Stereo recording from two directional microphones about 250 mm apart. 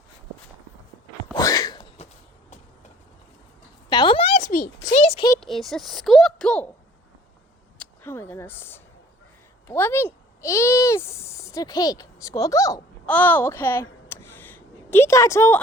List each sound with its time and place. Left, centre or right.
1.4 s sneeze: centre
3.8 s a sound: centre
5.3 s a child's voice: centre
7.8 s speech: centre